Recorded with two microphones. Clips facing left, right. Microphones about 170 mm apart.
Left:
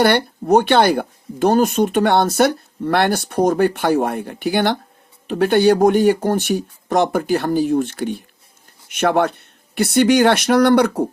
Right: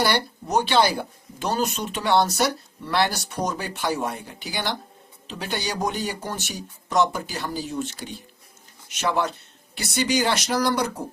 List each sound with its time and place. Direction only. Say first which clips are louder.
0.0 s speech: left 8 dB; 60° left (ahead or behind)